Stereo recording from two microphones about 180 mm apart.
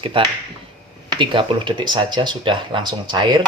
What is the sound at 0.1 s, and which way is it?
Speech, 30° right (ahead or behind).